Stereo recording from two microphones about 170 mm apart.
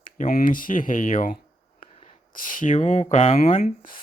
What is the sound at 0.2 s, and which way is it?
Speech, 50° left (ahead or behind).